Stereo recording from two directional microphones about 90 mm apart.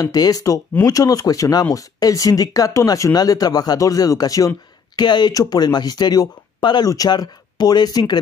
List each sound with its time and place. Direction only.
0.0 s speech: 45° left (ahead or behind)
4.9 s speech: 55° left (ahead or behind)